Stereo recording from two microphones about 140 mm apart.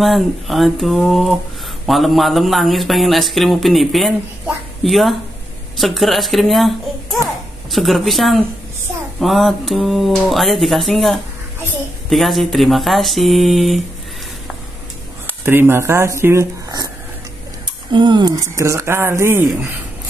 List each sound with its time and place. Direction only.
0.0 s a woman's voice: centre (ahead or behind)
15.2 s speech: 15° right (ahead or behind)
17.9 s speech: 35° right (ahead or behind); by 19.7 s 15° right (ahead or behind)